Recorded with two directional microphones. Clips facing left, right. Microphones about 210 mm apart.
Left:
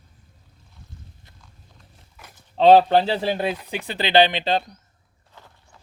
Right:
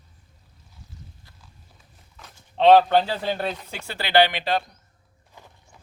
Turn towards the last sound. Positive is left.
turn(degrees=-15)  # may be behind; listen again after turning